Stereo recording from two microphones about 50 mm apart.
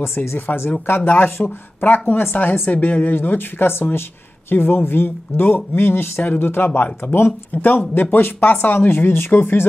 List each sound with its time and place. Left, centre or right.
0.0 s speech: left
0.5 s speech: left
6.7 s speech: left